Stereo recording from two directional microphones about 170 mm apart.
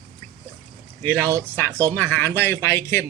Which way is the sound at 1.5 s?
10° left (ahead or behind).